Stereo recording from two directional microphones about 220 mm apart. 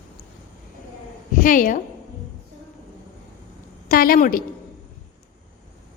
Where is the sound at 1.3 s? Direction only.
35° left (ahead or behind).